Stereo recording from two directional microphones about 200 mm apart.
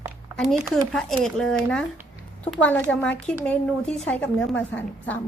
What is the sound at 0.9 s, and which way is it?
A woman's voice, centre (ahead or behind).